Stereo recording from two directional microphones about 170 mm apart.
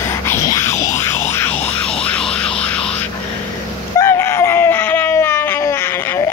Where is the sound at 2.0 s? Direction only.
5° left (ahead or behind).